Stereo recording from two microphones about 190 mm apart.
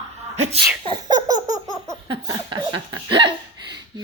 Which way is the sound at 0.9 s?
20° right (ahead or behind).